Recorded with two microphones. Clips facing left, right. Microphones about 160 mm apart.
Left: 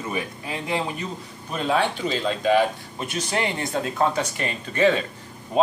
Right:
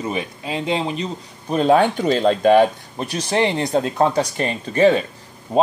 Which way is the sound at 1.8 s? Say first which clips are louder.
Right 7 dB; 50° right (ahead or behind).